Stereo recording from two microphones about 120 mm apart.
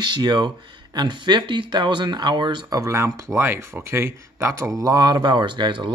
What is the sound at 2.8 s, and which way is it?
Speech, 25° right (ahead or behind).